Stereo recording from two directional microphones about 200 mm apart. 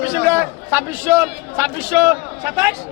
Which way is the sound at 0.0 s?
10° right (ahead or behind).